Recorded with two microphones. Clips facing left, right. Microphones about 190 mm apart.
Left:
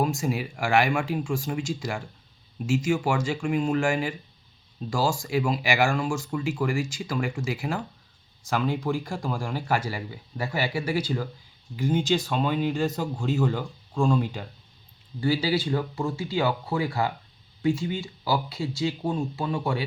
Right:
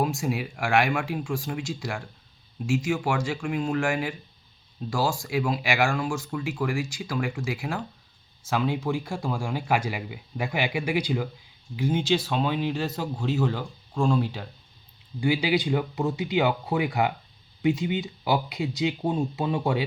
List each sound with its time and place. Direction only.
0.0 s speech: centre (ahead or behind)
12.2 s speech: 5° right (ahead or behind); by 19.8 s 25° right (ahead or behind)